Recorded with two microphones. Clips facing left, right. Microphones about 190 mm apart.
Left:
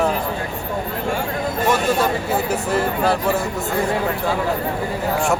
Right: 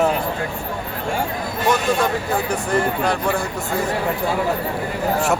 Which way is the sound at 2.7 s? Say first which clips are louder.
Even; 5° left (ahead or behind).